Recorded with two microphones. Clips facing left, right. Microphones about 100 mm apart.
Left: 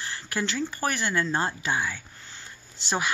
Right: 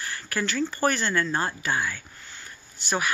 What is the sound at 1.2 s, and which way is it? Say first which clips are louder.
Speech: even; 25° left (ahead or behind).